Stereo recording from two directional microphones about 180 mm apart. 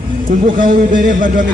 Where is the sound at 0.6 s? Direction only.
45° right (ahead or behind).